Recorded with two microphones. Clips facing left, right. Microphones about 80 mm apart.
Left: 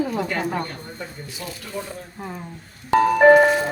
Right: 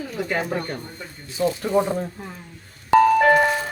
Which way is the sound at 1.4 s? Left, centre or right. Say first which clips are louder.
Right 14 dB; right.